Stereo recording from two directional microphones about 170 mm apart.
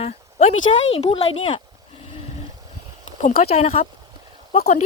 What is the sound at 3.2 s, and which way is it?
Speech, 50° left (ahead or behind).